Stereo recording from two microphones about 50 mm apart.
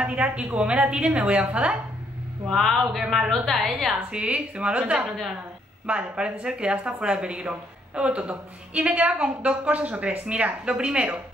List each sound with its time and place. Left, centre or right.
0.0 s speech: right
2.4 s a woman's voice: centre
4.1 s speech: right